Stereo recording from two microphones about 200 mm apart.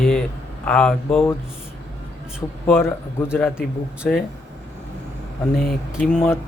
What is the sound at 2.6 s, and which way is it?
A man's voice, 10° left (ahead or behind).